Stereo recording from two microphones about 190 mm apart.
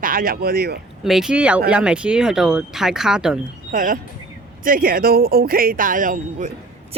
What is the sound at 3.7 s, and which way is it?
A man's voice, 45° right (ahead or behind).